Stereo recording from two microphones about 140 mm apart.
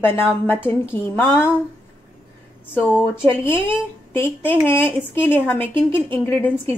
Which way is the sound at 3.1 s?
15° left (ahead or behind).